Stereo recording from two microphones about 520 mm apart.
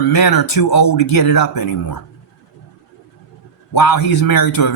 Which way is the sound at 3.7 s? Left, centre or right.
Left.